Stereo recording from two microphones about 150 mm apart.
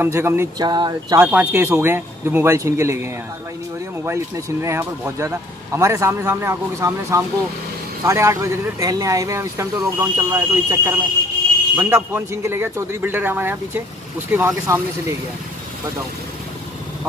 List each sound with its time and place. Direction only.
0.0 s speech: 15° right (ahead or behind)
0.6 s speech: 25° right (ahead or behind)
1.2 s speech: 10° right (ahead or behind)